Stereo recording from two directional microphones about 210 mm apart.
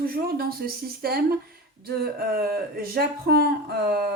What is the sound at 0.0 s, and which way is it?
Speech, 45° right (ahead or behind).